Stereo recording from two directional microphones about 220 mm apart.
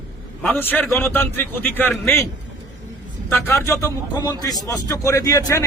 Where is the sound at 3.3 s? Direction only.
10° left (ahead or behind).